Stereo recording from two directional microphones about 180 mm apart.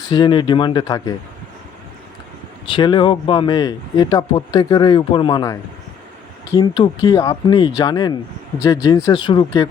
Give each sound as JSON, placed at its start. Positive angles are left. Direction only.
{"t": 0.1, "sound": "speech", "side_deg": 25}
{"t": 2.7, "sound": "speech", "side_deg": 25}
{"t": 6.6, "sound": "speech", "side_deg": 30}
{"t": 7.1, "sound": "speech", "side_deg": 20}